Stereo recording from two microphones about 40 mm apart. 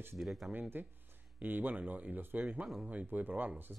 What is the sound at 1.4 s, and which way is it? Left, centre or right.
Speech, right.